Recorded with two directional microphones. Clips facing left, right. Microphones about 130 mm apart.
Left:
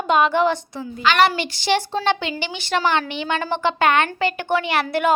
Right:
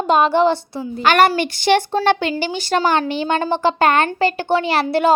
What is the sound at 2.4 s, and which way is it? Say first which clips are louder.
Speech: right 4 dB; 40° right (ahead or behind).